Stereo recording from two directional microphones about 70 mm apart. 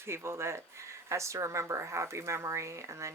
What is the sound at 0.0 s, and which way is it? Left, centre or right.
Speech, right.